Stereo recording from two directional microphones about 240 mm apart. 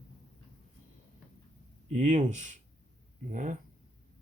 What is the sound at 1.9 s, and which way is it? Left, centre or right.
Speech, right.